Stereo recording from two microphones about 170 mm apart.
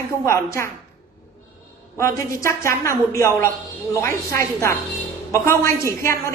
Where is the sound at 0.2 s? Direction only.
15° left (ahead or behind).